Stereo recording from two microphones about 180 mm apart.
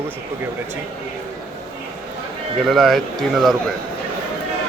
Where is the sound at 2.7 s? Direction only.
Centre (ahead or behind).